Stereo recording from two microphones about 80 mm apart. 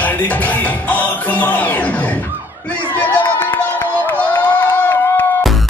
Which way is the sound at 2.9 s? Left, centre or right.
Left.